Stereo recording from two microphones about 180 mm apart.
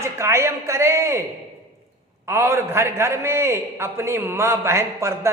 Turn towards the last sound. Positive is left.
turn(degrees=-15)  # may be behind; listen again after turning